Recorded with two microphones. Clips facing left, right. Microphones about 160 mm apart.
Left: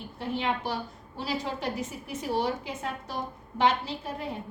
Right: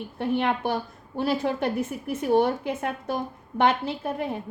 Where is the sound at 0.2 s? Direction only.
55° right (ahead or behind).